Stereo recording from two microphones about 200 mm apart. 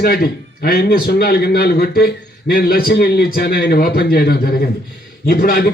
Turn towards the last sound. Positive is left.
turn(degrees=45)  # may be behind; listen again after turning